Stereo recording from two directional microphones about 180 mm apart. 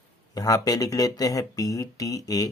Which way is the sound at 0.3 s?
20° left (ahead or behind).